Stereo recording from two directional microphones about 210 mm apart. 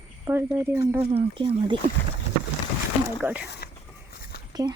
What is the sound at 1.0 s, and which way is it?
Speech, 30° right (ahead or behind).